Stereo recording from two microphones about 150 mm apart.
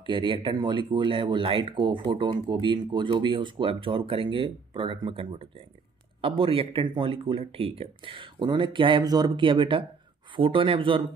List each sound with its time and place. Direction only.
0.0 s speech: 35° right (ahead or behind)